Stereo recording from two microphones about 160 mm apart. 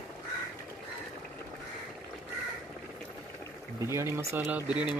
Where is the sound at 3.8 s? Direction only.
20° right (ahead or behind).